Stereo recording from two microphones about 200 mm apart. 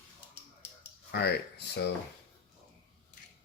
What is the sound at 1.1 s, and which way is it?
Speech, 55° left (ahead or behind).